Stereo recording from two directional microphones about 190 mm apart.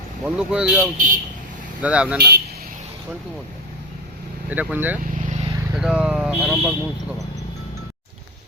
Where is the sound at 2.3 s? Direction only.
55° right (ahead or behind).